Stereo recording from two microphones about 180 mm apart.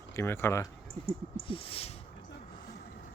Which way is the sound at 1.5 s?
30° left (ahead or behind).